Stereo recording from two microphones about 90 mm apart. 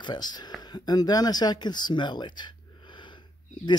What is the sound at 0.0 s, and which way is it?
Speech, 55° left (ahead or behind).